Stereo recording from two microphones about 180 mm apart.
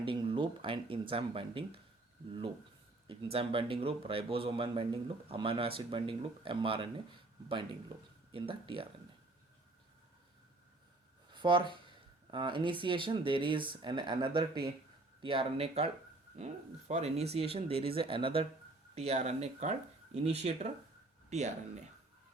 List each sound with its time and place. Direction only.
0.0 s speech: 30° right (ahead or behind)
3.1 s speech: 30° right (ahead or behind)
11.3 s speech: 25° right (ahead or behind)